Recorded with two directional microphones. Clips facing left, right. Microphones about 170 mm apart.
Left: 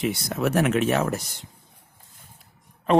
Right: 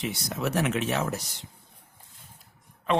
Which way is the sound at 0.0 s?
60° left (ahead or behind).